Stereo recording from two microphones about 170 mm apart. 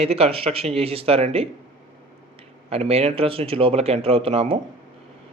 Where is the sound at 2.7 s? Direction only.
35° right (ahead or behind).